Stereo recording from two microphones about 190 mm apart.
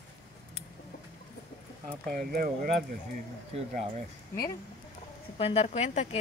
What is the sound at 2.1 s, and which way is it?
Speech, 50° right (ahead or behind).